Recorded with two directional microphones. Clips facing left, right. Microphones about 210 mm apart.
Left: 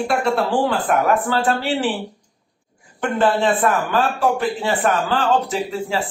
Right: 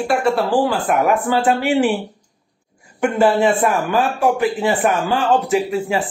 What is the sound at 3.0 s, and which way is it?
A man's voice, 10° right (ahead or behind).